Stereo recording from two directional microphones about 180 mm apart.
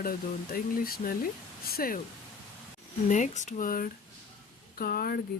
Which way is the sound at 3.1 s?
40° left (ahead or behind).